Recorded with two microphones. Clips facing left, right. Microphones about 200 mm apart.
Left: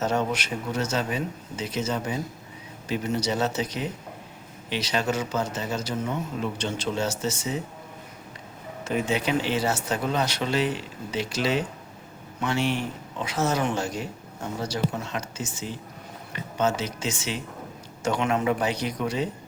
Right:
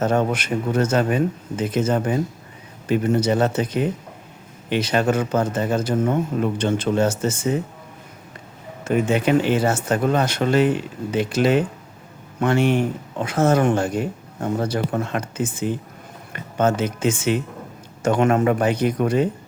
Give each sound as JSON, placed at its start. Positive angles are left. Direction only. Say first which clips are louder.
{"t": 0.0, "sound": "speech", "louder": "right 6 dB", "side_deg": -55}
{"t": 8.8, "sound": "speech", "louder": "right 7 dB", "side_deg": -50}